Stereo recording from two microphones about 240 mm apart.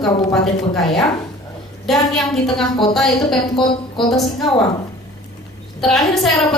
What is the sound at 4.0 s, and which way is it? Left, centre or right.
Speech, centre.